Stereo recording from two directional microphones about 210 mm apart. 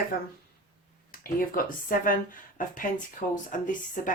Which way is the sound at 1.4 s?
40° left (ahead or behind).